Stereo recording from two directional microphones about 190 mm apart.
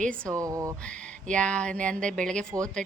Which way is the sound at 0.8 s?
5° left (ahead or behind).